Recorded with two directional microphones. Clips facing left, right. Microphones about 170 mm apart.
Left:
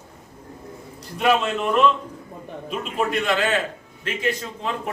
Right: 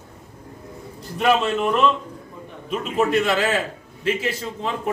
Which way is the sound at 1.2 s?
Centre (ahead or behind).